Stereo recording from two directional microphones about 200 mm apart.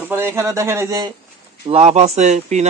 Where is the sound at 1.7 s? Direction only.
35° right (ahead or behind).